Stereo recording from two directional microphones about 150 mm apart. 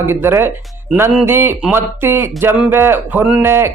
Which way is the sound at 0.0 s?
15° right (ahead or behind).